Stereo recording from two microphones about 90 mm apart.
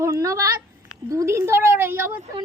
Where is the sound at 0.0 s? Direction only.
35° right (ahead or behind).